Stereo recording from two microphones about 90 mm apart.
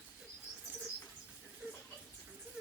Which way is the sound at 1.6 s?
15° right (ahead or behind).